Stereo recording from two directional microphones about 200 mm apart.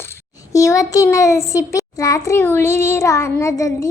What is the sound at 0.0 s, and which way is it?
A child's voice, 15° left (ahead or behind).